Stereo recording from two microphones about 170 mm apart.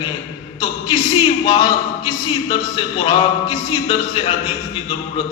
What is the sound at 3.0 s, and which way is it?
A man's voice, 30° left (ahead or behind).